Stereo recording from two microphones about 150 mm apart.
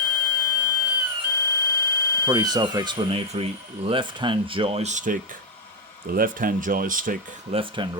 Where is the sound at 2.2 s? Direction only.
25° right (ahead or behind); by 5.2 s 55° right (ahead or behind).